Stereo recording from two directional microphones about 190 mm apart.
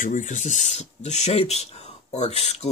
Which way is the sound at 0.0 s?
40° left (ahead or behind).